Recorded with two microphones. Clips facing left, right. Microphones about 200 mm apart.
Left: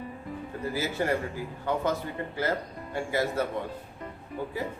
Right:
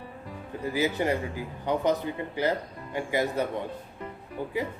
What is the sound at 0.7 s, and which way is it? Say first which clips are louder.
Speech: right 2 dB; 15° right (ahead or behind).